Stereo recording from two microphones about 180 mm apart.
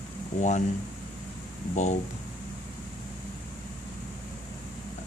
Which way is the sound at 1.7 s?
40° left (ahead or behind).